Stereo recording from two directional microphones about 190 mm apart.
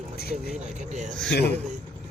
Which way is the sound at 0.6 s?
40° right (ahead or behind).